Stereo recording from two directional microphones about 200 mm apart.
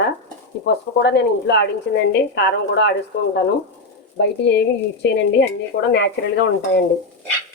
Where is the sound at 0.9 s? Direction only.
60° left (ahead or behind).